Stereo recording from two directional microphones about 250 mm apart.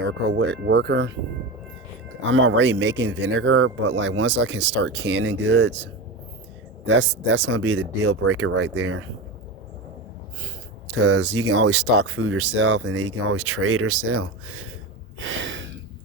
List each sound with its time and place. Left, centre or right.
0.0 s speech: right
2.2 s speech: right
6.8 s speech: right
11.0 s speech: right
15.2 s gasp: right